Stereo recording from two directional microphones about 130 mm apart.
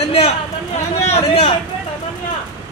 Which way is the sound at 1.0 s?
50° left (ahead or behind).